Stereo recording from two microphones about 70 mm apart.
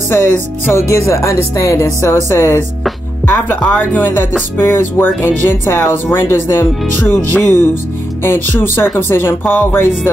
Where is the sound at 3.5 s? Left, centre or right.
Left.